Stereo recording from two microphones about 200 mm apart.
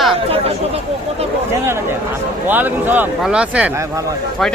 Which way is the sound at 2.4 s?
10° right (ahead or behind).